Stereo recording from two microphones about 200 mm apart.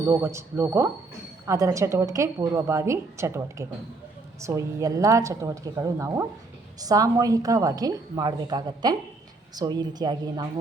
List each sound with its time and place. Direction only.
0.0 s a woman's voice: 15° right (ahead or behind)